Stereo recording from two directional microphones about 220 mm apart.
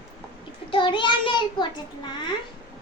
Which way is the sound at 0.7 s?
20° left (ahead or behind).